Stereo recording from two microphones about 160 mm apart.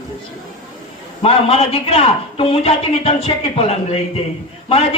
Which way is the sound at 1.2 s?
35° left (ahead or behind).